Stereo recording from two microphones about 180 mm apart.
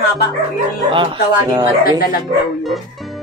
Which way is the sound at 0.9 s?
25° right (ahead or behind).